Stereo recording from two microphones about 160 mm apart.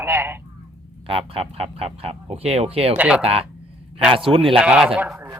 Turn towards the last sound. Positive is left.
turn(degrees=-10)  # may be behind; listen again after turning